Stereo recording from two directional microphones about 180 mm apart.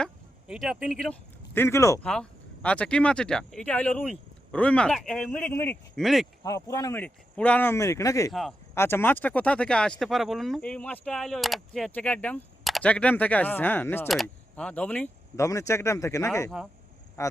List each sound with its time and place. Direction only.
0.0 s a sound: 5° right (ahead or behind)
1.5 s speech: 15° left (ahead or behind)
2.0 s speech: 5° left (ahead or behind)
6.4 s speech: 20° left (ahead or behind)
8.3 s speech: centre (ahead or behind)
8.7 s speech: 15° left (ahead or behind)